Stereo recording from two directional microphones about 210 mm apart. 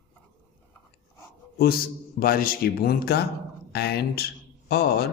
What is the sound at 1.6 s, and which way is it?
A man's voice, 45° left (ahead or behind).